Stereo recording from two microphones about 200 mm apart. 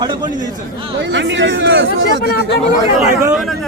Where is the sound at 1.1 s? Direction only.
65° right (ahead or behind).